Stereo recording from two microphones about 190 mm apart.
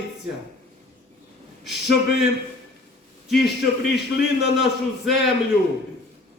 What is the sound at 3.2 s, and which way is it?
A man's voice, centre (ahead or behind).